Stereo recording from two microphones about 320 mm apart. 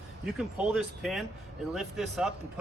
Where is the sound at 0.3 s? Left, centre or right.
Centre.